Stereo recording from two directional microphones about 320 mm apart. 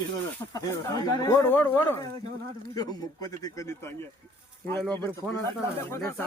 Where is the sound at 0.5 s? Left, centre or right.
Centre.